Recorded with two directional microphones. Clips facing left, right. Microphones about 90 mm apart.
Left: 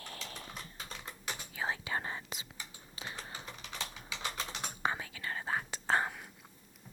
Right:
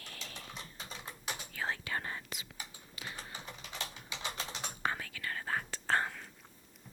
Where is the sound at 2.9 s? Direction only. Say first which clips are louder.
Left 1 dB; 30° left (ahead or behind).